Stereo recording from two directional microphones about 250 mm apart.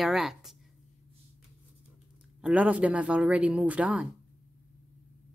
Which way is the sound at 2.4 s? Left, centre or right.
Centre.